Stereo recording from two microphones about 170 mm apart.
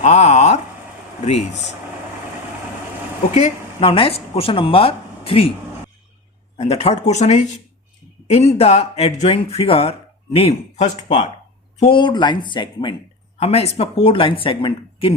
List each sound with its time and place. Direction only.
0.0 s a sound: 45° left (ahead or behind)
1.2 s speech: 40° left (ahead or behind)
3.3 s speech: 35° left (ahead or behind)
6.6 s speech: 35° left (ahead or behind)
11.8 s speech: 30° left (ahead or behind)
13.4 s speech: 40° left (ahead or behind)